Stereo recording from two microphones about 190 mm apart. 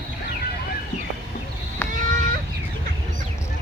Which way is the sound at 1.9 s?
45° right (ahead or behind).